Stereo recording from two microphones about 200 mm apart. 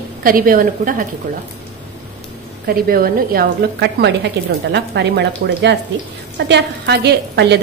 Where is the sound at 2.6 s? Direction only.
50° right (ahead or behind).